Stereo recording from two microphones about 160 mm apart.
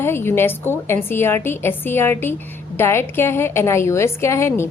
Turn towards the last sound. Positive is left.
turn(degrees=15)  # may be behind; listen again after turning